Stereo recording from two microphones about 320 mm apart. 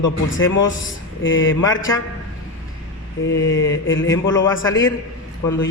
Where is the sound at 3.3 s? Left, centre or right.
Left.